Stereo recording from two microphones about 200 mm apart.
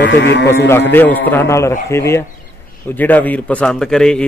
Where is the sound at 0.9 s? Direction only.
10° left (ahead or behind).